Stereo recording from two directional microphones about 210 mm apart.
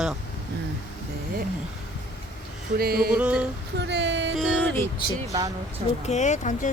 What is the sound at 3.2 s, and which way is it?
Speech, 5° right (ahead or behind).